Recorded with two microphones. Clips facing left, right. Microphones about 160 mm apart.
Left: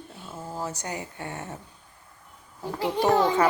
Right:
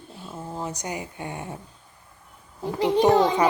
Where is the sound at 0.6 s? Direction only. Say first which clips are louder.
Right 1 dB; 15° right (ahead or behind).